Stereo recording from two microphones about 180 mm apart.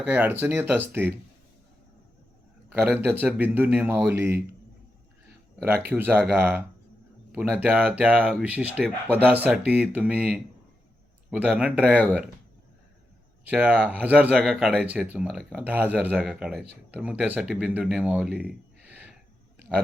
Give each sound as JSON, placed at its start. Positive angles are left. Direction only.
{"t": 0.0, "sound": "speech", "side_deg": -10}
{"t": 2.7, "sound": "speech", "side_deg": -10}
{"t": 5.6, "sound": "speech", "side_deg": -10}
{"t": 13.4, "sound": "speech", "side_deg": -10}